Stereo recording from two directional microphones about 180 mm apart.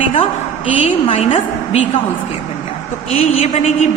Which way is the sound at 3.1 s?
35° left (ahead or behind).